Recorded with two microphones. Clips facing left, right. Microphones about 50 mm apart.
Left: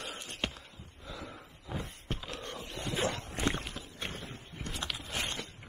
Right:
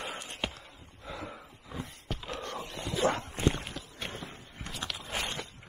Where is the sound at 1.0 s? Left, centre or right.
Centre.